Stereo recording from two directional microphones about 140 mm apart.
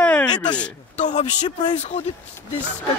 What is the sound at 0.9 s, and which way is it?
Speech, 55° left (ahead or behind).